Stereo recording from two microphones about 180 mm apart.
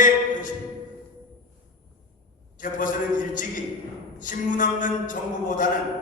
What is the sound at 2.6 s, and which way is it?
Speech, 45° left (ahead or behind).